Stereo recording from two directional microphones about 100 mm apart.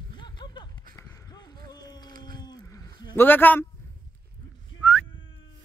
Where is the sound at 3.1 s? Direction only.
20° left (ahead or behind).